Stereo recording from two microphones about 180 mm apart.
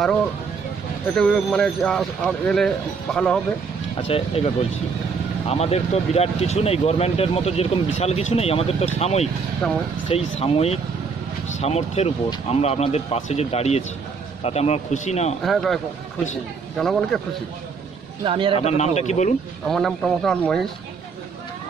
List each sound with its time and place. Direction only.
1.1 s speech: 5° left (ahead or behind)
4.1 s speech: 35° left (ahead or behind)
9.6 s speech: 5° left (ahead or behind)
10.0 s speech: 30° left (ahead or behind)
15.4 s speech: centre (ahead or behind)
18.2 s a man's voice: 30° right (ahead or behind)
18.5 s speech: 35° left (ahead or behind)
19.7 s speech: centre (ahead or behind)